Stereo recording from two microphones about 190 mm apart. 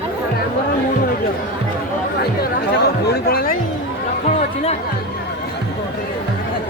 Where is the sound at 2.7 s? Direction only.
60° left (ahead or behind).